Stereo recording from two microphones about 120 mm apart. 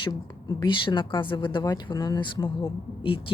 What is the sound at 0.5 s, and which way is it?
A woman's voice, 40° left (ahead or behind).